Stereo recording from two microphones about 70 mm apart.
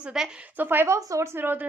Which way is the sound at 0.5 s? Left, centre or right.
Right.